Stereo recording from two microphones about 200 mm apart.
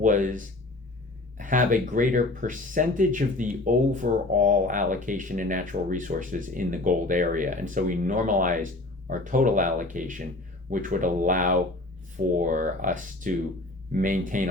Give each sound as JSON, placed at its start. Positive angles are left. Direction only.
{"t": 0.0, "sound": "speech", "side_deg": -40}